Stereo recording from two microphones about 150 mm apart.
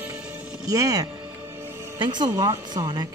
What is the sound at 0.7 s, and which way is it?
Speech, 25° right (ahead or behind).